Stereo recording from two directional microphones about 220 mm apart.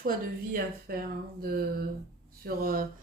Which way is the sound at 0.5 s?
40° right (ahead or behind).